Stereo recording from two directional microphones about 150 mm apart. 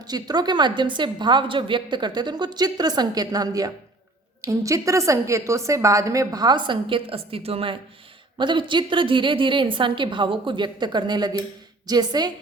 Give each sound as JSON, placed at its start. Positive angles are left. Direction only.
{"t": 0.0, "sound": "a woman's voice", "side_deg": -25}